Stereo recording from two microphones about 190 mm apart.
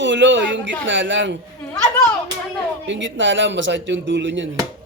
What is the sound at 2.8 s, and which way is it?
A man's voice, 75° right (ahead or behind).